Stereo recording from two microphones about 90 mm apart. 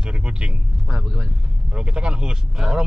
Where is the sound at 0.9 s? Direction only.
25° right (ahead or behind).